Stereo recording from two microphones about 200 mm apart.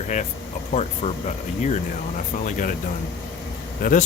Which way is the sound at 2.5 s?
40° left (ahead or behind).